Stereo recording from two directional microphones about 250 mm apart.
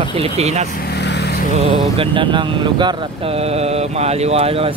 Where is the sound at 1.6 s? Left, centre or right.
Right.